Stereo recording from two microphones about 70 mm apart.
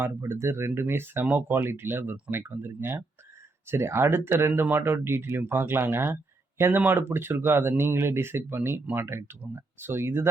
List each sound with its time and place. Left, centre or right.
0.2 s speech: right